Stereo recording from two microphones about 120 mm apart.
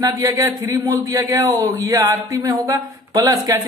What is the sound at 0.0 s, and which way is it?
Speech, 30° right (ahead or behind).